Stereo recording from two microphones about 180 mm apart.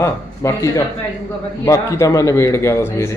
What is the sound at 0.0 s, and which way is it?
A man's voice, 15° left (ahead or behind).